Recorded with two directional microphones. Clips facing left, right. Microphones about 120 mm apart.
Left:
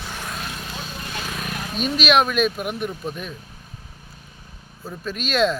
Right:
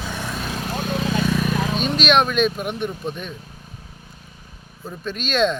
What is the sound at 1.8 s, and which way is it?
Speech, 5° left (ahead or behind).